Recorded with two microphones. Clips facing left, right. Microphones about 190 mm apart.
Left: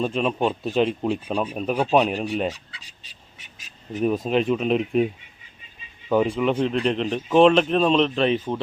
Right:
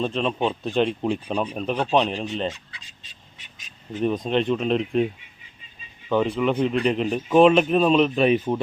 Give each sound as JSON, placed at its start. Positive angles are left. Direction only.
{"t": 0.0, "sound": "a man's voice", "side_deg": 5}
{"t": 3.9, "sound": "a man's voice", "side_deg": 5}
{"t": 6.1, "sound": "a man's voice", "side_deg": 5}